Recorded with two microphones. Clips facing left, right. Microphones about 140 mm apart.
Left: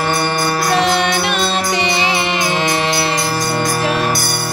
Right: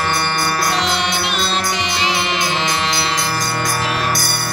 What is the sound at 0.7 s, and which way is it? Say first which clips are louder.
Music: left 5 dB; 50° left (ahead or behind).